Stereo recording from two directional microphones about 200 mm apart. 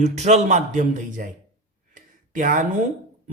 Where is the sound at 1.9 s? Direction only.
40° right (ahead or behind).